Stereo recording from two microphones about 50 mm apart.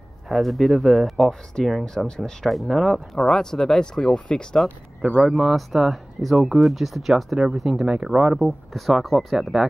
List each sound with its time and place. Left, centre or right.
0.3 s speech: centre
2.5 s speech: centre
5.0 s speech: right
5.3 s speech: centre
7.8 s speech: centre
8.4 s speech: centre